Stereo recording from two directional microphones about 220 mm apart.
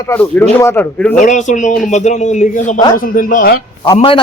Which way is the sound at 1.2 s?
35° left (ahead or behind).